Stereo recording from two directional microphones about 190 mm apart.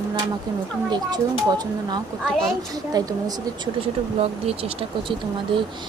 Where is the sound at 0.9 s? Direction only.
20° right (ahead or behind).